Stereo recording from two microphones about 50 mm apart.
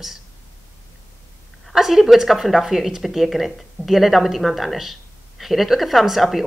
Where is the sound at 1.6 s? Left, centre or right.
Centre.